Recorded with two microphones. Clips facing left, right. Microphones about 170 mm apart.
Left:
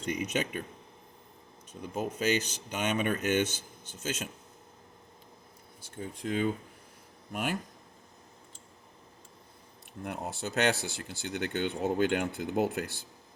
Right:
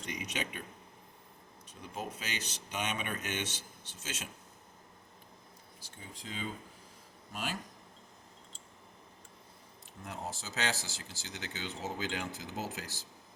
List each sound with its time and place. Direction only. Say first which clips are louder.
0.1 s speech: left 8 dB; 50° left (ahead or behind)
2.0 s speech: left 11 dB; 45° left (ahead or behind)
6.0 s speech: left 12 dB; 55° left (ahead or behind)
10.0 s speech: left 6 dB; 60° left (ahead or behind)